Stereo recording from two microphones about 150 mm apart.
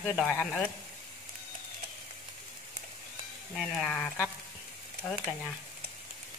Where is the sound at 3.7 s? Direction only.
5° left (ahead or behind).